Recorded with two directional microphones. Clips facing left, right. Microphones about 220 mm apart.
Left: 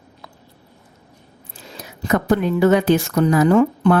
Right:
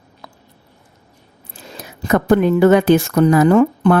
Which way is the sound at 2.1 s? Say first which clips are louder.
Right 4 dB; 50° right (ahead or behind).